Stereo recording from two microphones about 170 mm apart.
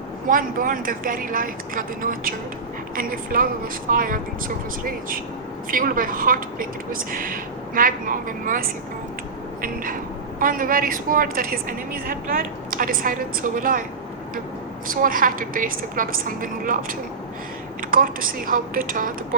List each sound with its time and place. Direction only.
0.3 s a woman's voice: 55° right (ahead or behind)
9.6 s cat: 55° right (ahead or behind)
10.4 s a woman's voice: 55° right (ahead or behind)
14.8 s a woman's voice: 55° right (ahead or behind)
17.9 s a woman's voice: 55° right (ahead or behind)